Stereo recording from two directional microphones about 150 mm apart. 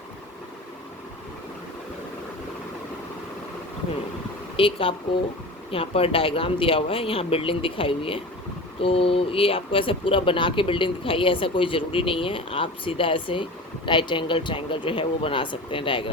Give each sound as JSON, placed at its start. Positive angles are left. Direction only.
{"t": 4.5, "sound": "speech", "side_deg": 35}